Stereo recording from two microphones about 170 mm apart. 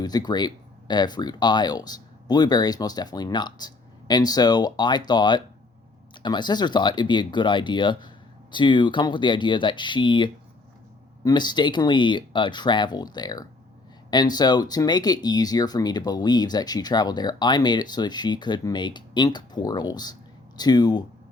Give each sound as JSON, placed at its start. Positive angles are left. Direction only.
{"t": 0.0, "sound": "speech", "side_deg": 25}